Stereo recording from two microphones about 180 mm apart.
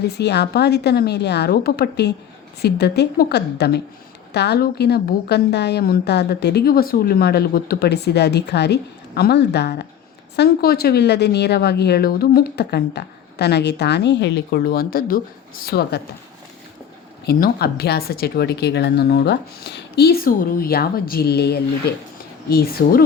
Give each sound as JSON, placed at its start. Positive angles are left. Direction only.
{"t": 0.2, "sound": "a woman's voice", "side_deg": 65}
{"t": 17.2, "sound": "a woman's voice", "side_deg": 60}